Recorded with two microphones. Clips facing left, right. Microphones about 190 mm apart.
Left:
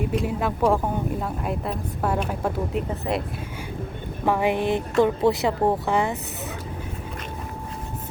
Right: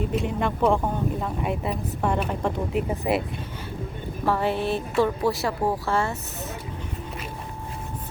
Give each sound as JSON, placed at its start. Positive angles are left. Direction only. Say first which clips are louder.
{"t": 0.2, "sound": "a woman's voice", "louder": "right 1 dB", "side_deg": 5}
{"t": 4.3, "sound": "speech", "louder": "left 2 dB", "side_deg": 15}